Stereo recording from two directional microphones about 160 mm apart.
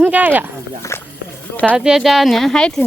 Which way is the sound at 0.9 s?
15° left (ahead or behind).